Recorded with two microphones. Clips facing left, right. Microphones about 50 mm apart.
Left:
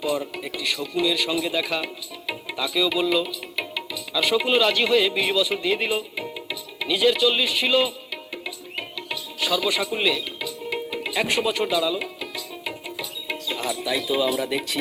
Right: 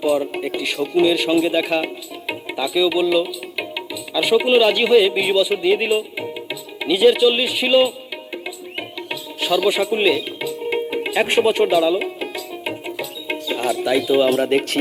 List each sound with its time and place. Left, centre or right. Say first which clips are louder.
0.0 s speech: right 7 dB; right
9.0 s music: right 2 dB; right
13.7 s speech: right 8 dB; right